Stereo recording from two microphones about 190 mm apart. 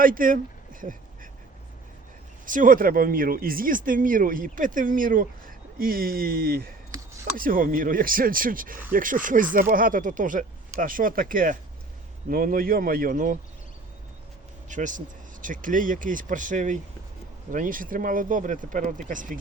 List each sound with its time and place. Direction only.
0.0 s a sound: 45° right (ahead or behind)
2.5 s speech: 45° right (ahead or behind)
14.7 s speech: 40° right (ahead or behind)